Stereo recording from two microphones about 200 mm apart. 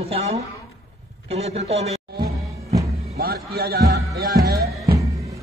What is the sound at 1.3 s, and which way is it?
Speech, 30° right (ahead or behind).